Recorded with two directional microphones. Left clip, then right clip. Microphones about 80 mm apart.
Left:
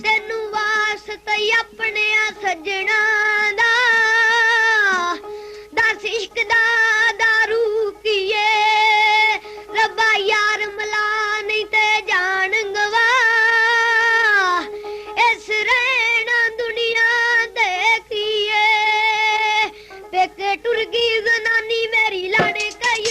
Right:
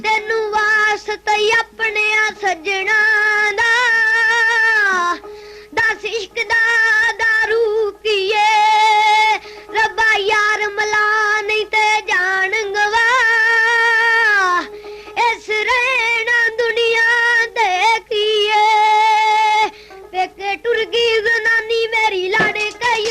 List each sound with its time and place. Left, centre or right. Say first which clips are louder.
0.3 s child singing: right 5 dB; right
7.1 s music: right 1 dB; right
20.1 s a sound: left 1 dB; right